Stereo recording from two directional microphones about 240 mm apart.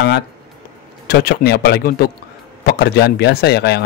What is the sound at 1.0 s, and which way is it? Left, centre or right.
A man's voice, left.